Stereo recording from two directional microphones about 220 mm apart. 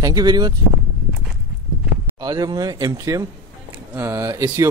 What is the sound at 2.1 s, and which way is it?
Speech, 15° right (ahead or behind).